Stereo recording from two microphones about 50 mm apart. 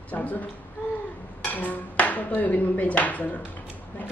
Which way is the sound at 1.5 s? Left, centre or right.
Left.